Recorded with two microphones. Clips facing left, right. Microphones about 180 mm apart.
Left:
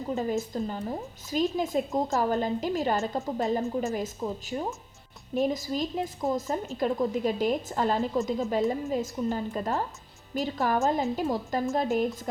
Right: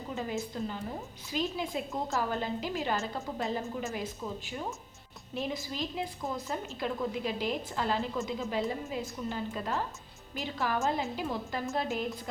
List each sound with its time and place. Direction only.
0.1 s a woman's voice: 40° left (ahead or behind)